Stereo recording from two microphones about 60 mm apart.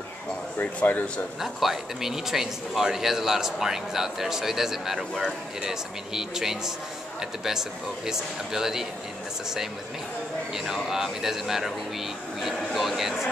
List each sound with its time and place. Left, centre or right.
0.6 s speech: left
1.4 s speech: centre
10.5 s speech: centre